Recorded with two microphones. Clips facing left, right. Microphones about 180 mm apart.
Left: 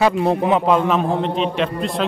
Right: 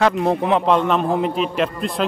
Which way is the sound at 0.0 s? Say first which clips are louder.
Left 1 dB; centre (ahead or behind).